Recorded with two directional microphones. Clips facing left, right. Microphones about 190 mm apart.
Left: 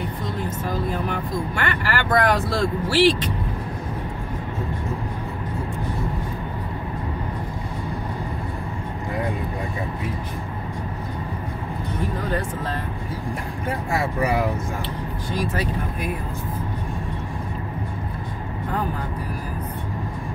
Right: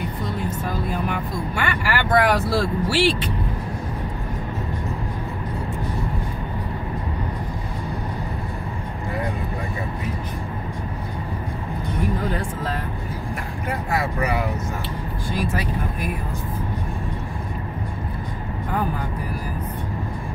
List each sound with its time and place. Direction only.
1.6 s speech: 10° right (ahead or behind)
13.8 s speech: 25° left (ahead or behind)